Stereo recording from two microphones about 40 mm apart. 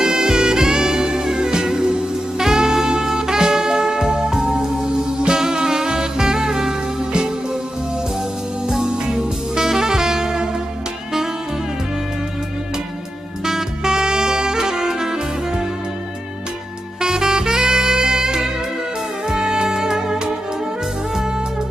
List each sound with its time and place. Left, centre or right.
0.0 s music: centre
8.8 s saxophone: right
13.5 s saxophone: centre
17.0 s saxophone: centre
19.2 s music: centre